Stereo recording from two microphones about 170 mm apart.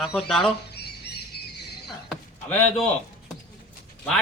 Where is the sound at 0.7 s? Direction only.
70° left (ahead or behind).